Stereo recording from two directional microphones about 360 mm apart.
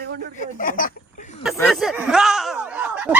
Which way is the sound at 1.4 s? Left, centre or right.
Centre.